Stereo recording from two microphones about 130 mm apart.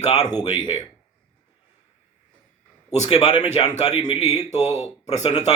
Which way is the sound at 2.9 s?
55° left (ahead or behind).